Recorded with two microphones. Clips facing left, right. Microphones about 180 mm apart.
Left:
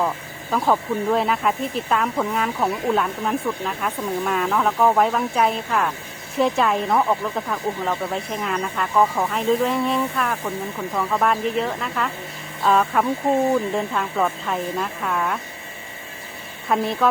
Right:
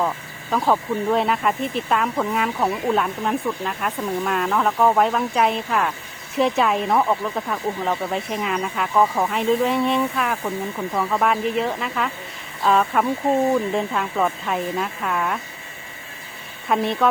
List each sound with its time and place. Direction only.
0.5 s speech: centre (ahead or behind)
16.6 s speech: centre (ahead or behind)